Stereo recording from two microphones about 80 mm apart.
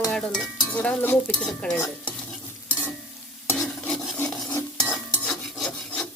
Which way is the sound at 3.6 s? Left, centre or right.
Centre.